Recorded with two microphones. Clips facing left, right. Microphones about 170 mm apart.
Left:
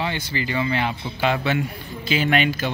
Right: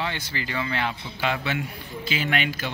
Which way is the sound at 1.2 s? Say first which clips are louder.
Left 5 dB; 35° left (ahead or behind).